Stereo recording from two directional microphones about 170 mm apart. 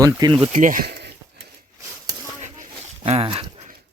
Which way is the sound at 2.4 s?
50° right (ahead or behind).